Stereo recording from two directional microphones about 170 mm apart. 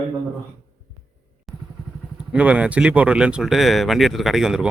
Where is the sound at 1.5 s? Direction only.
Centre (ahead or behind).